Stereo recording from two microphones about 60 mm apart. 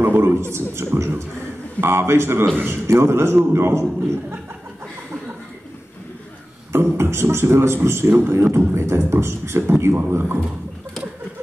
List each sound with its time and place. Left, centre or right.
0.0 s a sound: right
0.4 s a man's voice: right
2.9 s a man's voice: right
6.7 s a man's voice: right